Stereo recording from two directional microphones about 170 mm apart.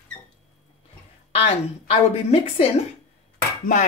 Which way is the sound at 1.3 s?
35° left (ahead or behind).